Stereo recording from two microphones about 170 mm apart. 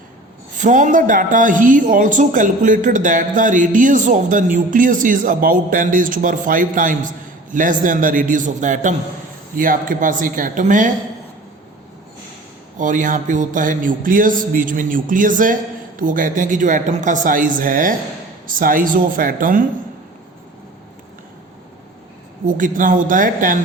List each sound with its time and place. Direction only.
0.6 s speech: 50° right (ahead or behind)
12.8 s speech: 50° right (ahead or behind)
22.4 s speech: 50° right (ahead or behind)